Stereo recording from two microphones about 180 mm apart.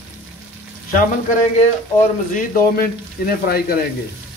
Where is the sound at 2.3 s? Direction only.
55° left (ahead or behind).